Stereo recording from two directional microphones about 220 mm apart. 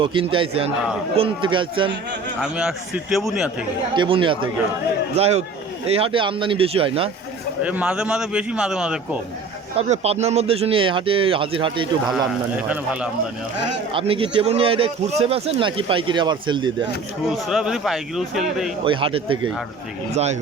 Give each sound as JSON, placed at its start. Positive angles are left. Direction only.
{"t": 0.0, "sound": "speech", "side_deg": -25}
{"t": 2.4, "sound": "a man's voice", "side_deg": 0}
{"t": 3.9, "sound": "speech", "side_deg": -20}
{"t": 7.6, "sound": "a man's voice", "side_deg": -5}
{"t": 9.7, "sound": "speech", "side_deg": -30}
{"t": 12.0, "sound": "a man's voice", "side_deg": 0}
{"t": 13.9, "sound": "speech", "side_deg": -25}
{"t": 17.2, "sound": "a man's voice", "side_deg": 0}
{"t": 18.9, "sound": "speech", "side_deg": -25}